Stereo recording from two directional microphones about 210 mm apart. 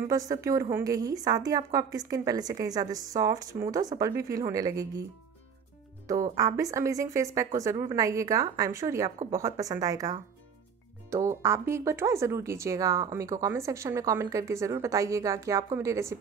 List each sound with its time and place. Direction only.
0.1 s speech: 15° right (ahead or behind)
6.3 s speech: 15° right (ahead or behind)